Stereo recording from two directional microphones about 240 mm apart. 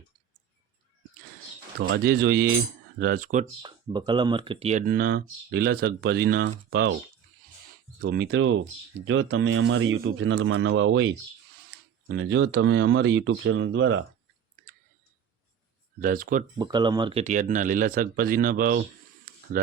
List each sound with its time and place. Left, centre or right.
1.8 s speech: right
3.6 s speech: centre
4.9 s speech: right
8.0 s speech: right
16.0 s speech: right
16.6 s speech: centre; by 19.7 s right